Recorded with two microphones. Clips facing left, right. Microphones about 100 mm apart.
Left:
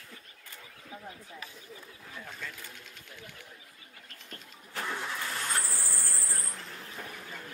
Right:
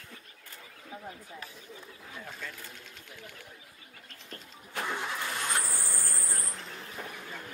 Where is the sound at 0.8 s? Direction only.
5° right (ahead or behind).